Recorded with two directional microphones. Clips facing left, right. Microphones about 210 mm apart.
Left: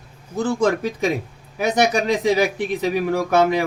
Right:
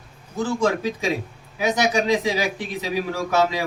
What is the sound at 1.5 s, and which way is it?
Speech, 55° left (ahead or behind).